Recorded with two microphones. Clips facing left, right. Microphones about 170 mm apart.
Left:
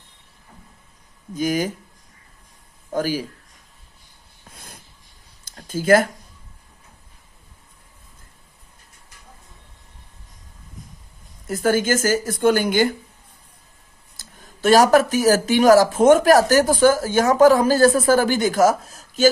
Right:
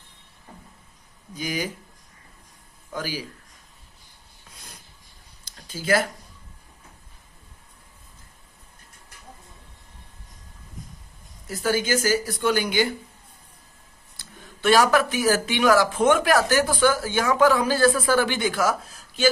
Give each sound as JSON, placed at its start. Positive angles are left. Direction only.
{"t": 1.3, "sound": "speech", "side_deg": 45}
{"t": 2.9, "sound": "speech", "side_deg": 45}
{"t": 4.4, "sound": "wheeze", "side_deg": 50}
{"t": 5.5, "sound": "a sound", "side_deg": 50}
{"t": 11.4, "sound": "speech", "side_deg": 50}
{"t": 14.2, "sound": "speech", "side_deg": 40}